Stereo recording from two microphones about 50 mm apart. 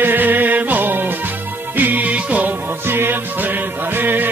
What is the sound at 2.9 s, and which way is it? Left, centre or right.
Music, right.